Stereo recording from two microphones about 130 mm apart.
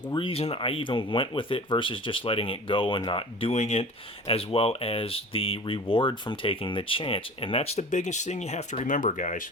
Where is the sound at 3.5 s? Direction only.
55° left (ahead or behind); by 9.5 s 85° left.